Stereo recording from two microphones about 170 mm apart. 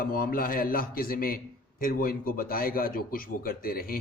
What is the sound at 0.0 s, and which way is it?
A man's voice, 55° left (ahead or behind).